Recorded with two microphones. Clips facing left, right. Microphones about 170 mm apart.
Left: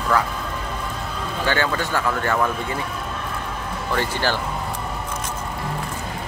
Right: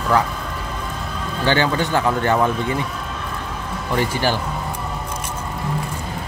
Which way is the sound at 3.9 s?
15° right (ahead or behind).